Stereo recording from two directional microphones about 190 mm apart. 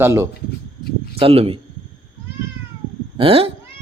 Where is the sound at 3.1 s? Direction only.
30° right (ahead or behind).